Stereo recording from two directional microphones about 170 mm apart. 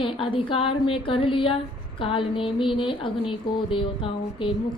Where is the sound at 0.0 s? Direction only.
30° left (ahead or behind).